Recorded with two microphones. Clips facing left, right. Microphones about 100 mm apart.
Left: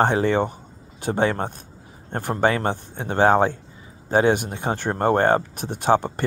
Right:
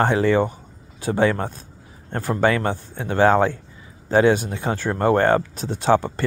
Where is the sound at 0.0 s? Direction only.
25° left (ahead or behind).